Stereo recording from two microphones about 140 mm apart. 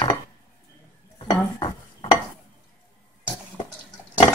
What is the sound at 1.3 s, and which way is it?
Dishes, 30° left (ahead or behind).